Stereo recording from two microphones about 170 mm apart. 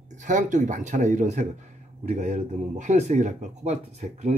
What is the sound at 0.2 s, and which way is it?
A man's voice, 45° right (ahead or behind).